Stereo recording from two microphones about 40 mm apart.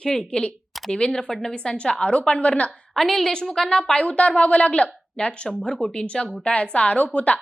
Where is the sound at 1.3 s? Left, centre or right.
Centre.